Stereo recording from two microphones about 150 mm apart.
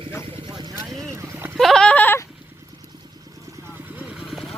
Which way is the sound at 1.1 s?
15° right (ahead or behind).